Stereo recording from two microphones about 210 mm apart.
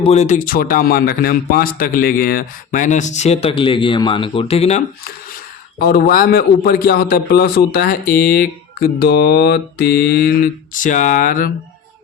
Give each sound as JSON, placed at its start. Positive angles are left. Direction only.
{"t": 0.0, "sound": "speech", "side_deg": 30}
{"t": 5.8, "sound": "a man's voice", "side_deg": 45}